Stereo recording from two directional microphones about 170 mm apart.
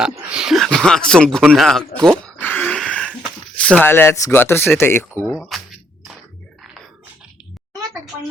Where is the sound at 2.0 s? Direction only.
10° left (ahead or behind).